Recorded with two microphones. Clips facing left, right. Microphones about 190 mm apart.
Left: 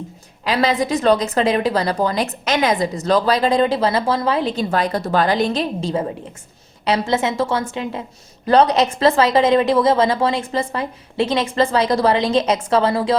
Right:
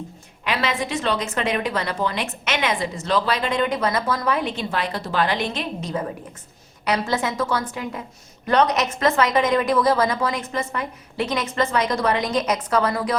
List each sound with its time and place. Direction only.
0.4 s a woman's voice: 35° left (ahead or behind)